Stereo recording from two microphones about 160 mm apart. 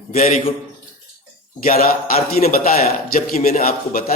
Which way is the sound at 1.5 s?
60° left (ahead or behind).